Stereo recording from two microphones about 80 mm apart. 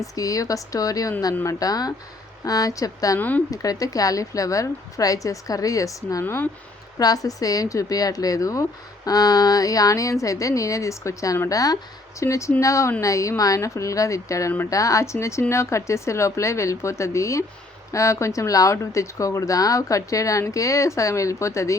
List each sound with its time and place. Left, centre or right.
0.0 s a woman's voice: left
3.2 s speech: left
3.5 s a woman's voice: left
6.2 s speech: left
7.0 s a woman's voice: left